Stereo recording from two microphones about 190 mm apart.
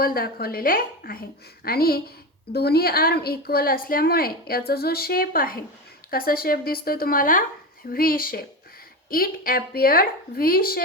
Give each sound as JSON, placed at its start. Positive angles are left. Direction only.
{"t": 0.0, "sound": "a woman's voice", "side_deg": 50}